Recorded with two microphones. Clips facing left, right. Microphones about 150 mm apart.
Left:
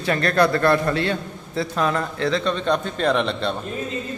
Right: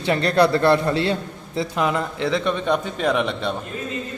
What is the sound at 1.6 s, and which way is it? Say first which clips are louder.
Speech: even; 15° right (ahead or behind).